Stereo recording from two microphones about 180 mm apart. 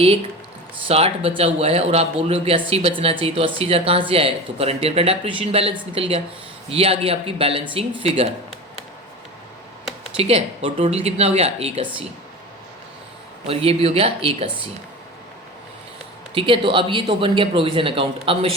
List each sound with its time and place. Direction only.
0.9 s speech: 35° right (ahead or behind)
10.2 s speech: 35° right (ahead or behind)
13.5 s speech: 35° right (ahead or behind)
16.3 s speech: 30° right (ahead or behind)